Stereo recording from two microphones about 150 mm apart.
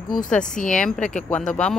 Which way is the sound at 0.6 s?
5° left (ahead or behind).